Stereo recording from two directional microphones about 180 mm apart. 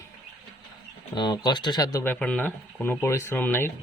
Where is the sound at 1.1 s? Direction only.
25° left (ahead or behind).